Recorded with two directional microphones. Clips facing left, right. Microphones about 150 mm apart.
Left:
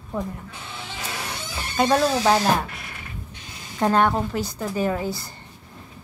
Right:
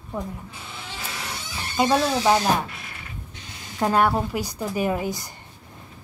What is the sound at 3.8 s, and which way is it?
Speech, 5° right (ahead or behind).